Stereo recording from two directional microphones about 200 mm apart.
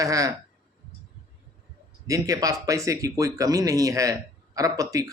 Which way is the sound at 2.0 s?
15° right (ahead or behind).